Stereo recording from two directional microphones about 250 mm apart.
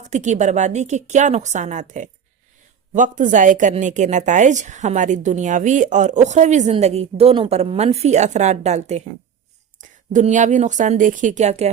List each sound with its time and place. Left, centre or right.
0.1 s a woman's voice: right
10.1 s a woman's voice: right